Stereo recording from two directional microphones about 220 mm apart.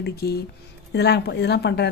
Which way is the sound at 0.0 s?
45° left (ahead or behind).